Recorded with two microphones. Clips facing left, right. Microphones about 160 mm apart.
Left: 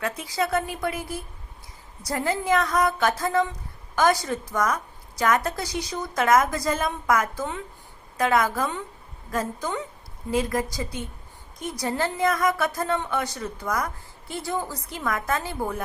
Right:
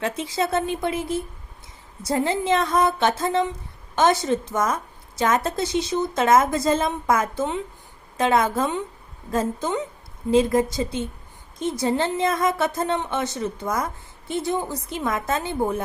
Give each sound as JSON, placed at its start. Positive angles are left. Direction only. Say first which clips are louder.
{"t": 0.0, "sound": "a woman's voice", "louder": "right 2 dB", "side_deg": -25}